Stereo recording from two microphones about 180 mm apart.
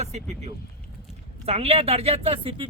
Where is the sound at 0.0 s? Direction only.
40° right (ahead or behind).